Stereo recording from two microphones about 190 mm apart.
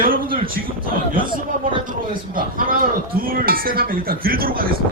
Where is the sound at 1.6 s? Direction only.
45° right (ahead or behind).